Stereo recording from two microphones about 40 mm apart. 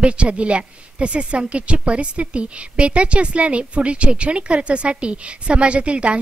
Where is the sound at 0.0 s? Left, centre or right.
Right.